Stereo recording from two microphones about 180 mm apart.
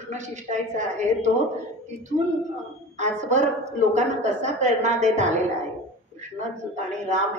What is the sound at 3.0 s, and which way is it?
A woman's voice, 40° right (ahead or behind).